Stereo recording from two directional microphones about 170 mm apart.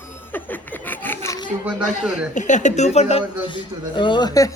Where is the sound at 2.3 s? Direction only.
45° left (ahead or behind); by 4.5 s 20° left (ahead or behind).